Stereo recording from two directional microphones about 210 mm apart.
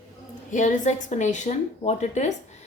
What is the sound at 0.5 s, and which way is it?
A woman's voice, 35° left (ahead or behind).